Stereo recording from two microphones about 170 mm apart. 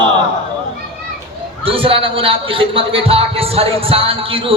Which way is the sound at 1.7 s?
30° right (ahead or behind).